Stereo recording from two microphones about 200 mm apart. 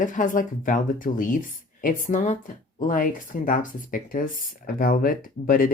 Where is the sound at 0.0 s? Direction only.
40° left (ahead or behind).